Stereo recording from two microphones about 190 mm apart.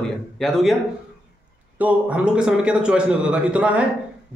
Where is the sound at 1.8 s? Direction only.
10° right (ahead or behind).